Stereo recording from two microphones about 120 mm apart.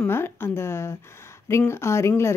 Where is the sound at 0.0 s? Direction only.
20° left (ahead or behind).